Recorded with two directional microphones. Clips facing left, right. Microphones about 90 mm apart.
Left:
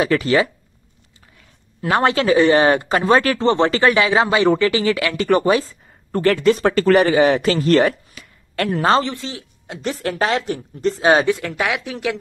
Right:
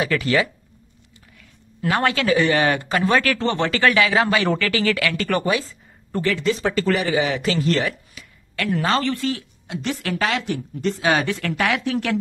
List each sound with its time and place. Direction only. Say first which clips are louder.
0.0 s speech: left 4 dB; 30° left (ahead or behind)
1.9 s speech: left 4 dB; 25° left (ahead or behind)
5.4 s speech: left 5 dB; 35° left (ahead or behind)
6.1 s speech: left 6 dB; 55° left (ahead or behind); by 9.0 s 35° left (ahead or behind)
9.0 s speech: right 4 dB; 20° left (ahead or behind)
9.7 s speech: left 2 dB; 35° left (ahead or behind)
11.2 s speech: left 2 dB; 10° left (ahead or behind)